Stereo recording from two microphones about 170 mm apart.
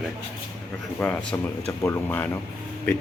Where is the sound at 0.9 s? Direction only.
10° left (ahead or behind).